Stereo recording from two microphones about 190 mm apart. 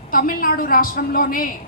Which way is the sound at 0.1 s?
50° left (ahead or behind).